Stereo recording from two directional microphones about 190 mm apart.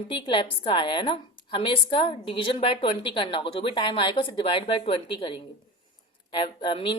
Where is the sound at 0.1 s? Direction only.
25° left (ahead or behind).